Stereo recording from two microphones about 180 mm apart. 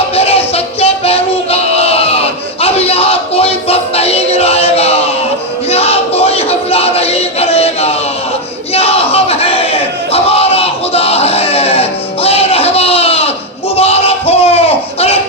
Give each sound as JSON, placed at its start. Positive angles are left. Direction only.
{"t": 0.2, "sound": "music", "side_deg": 35}
{"t": 8.7, "sound": "crowd", "side_deg": 35}
{"t": 13.7, "sound": "a sound", "side_deg": 35}